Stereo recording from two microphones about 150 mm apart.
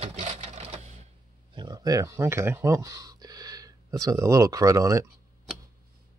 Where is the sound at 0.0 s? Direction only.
45° right (ahead or behind).